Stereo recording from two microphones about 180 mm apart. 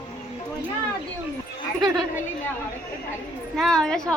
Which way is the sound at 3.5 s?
Centre (ahead or behind).